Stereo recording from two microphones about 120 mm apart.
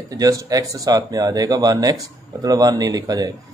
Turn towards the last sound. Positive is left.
turn(degrees=-30)  # may be behind; listen again after turning